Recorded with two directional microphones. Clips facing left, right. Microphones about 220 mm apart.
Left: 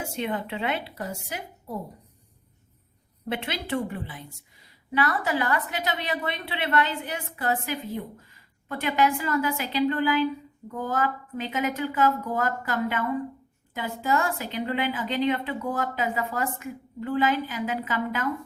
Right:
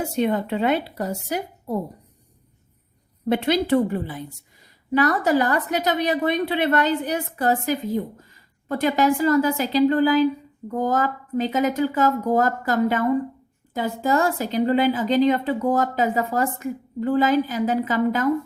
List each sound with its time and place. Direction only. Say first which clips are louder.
0.0 s a woman's voice: right 8 dB; 40° right (ahead or behind)
3.2 s a woman's voice: right 11 dB; 40° right (ahead or behind)